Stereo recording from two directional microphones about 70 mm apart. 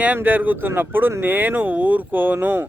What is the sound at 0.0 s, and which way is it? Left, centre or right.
Speech, right.